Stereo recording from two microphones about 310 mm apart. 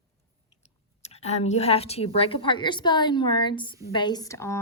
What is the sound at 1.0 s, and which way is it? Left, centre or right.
Speech, left.